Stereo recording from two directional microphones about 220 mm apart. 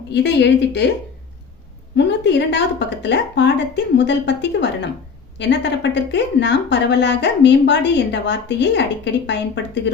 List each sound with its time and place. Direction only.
0.1 s speech: 50° left (ahead or behind)
2.0 s speech: 50° left (ahead or behind)